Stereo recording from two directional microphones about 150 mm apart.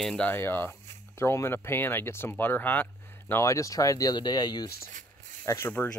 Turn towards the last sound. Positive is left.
turn(degrees=10)  # may be behind; listen again after turning